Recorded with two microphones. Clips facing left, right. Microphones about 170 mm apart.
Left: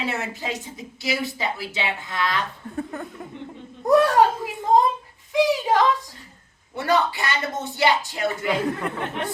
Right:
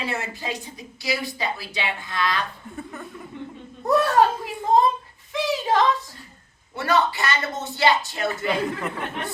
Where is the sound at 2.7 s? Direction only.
40° left (ahead or behind).